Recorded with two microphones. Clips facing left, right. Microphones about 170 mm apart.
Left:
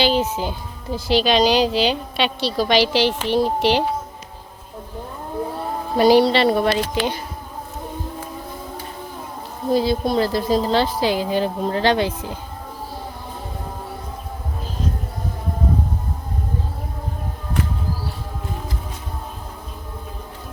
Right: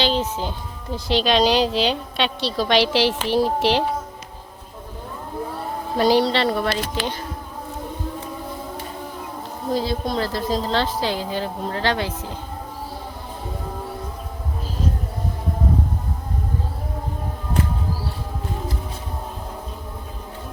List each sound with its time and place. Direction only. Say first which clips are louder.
0.0 s speech: left 3 dB; 10° left (ahead or behind)
6.0 s a woman's voice: left 4 dB; 10° left (ahead or behind)
9.7 s a woman's voice: left 5 dB; 10° left (ahead or behind)